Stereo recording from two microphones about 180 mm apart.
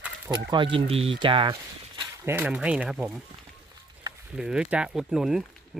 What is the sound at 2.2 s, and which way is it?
Speech, 10° right (ahead or behind).